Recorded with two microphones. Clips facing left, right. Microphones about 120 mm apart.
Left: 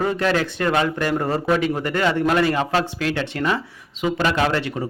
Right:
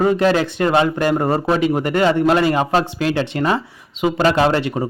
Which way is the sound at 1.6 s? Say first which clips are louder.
Right 5 dB; 20° right (ahead or behind).